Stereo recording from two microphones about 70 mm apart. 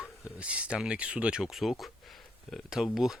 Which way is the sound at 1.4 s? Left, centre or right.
Centre.